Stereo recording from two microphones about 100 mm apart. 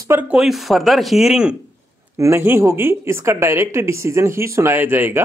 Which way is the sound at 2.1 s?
30° right (ahead or behind).